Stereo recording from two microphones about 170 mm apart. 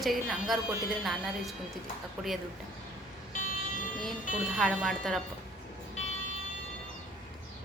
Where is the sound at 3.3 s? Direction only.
50° left (ahead or behind).